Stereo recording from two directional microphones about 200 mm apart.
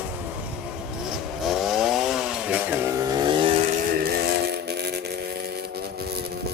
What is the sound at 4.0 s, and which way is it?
Vehicle, 50° right (ahead or behind).